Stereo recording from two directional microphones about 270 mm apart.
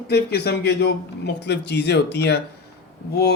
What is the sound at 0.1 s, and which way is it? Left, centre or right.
Speech, left.